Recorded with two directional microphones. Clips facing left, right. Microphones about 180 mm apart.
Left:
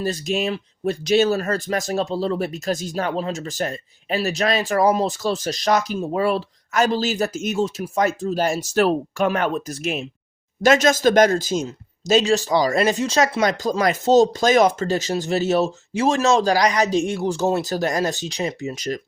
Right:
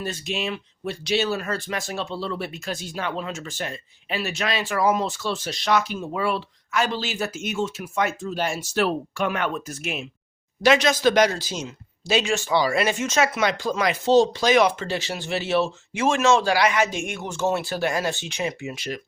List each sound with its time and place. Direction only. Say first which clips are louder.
0.0 s speech: left 6 dB; 35° left (ahead or behind)